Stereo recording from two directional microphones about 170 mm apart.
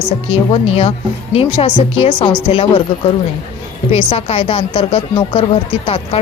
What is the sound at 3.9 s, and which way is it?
Speech, 35° left (ahead or behind).